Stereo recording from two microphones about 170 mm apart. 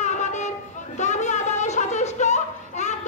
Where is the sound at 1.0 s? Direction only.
45° left (ahead or behind).